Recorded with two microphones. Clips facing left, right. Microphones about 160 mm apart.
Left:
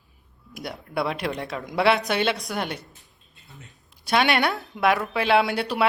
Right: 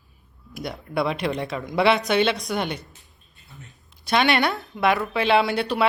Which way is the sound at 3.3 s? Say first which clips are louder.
Right 1 dB; 20° left (ahead or behind).